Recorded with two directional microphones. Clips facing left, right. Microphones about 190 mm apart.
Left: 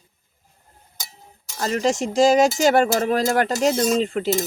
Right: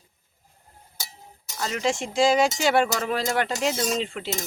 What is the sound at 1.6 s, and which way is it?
Speech, 40° left (ahead or behind).